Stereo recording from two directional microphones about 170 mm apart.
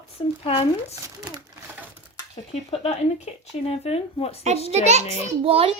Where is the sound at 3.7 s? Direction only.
35° left (ahead or behind).